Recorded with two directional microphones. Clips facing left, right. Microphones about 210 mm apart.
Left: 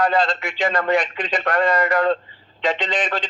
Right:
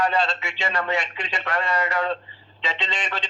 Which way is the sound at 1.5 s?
55° left (ahead or behind).